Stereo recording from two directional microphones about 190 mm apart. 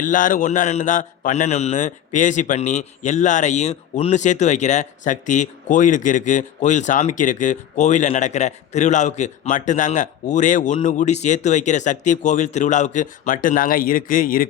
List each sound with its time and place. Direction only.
0.0 s a man's voice: 45° left (ahead or behind)